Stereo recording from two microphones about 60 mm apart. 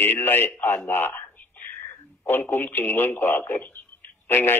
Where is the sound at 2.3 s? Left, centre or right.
Left.